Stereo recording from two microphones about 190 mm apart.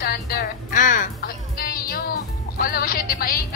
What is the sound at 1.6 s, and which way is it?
Music, 50° left (ahead or behind).